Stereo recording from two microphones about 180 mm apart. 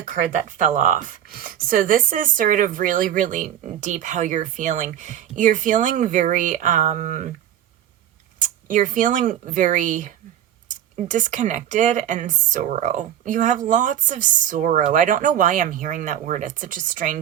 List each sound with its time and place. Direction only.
0.0 s speech: 45° right (ahead or behind)
8.4 s speech: 45° right (ahead or behind)